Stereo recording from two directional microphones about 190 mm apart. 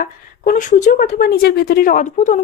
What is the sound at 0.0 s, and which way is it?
A woman's voice, 45° left (ahead or behind).